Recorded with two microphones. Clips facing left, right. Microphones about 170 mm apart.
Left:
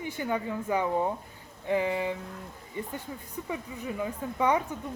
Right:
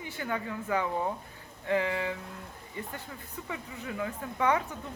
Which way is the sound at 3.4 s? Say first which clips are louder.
Left 4 dB; 20° left (ahead or behind).